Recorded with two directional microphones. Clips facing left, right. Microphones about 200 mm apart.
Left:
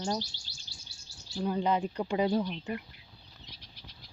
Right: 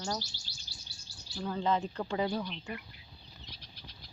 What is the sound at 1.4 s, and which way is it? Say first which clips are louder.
Speech: left 3 dB; 15° left (ahead or behind).